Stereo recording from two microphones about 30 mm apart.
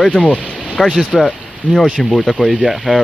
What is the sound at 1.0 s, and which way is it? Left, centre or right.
Speech, centre.